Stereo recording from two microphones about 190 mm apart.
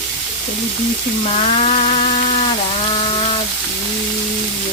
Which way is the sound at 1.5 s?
35° left (ahead or behind).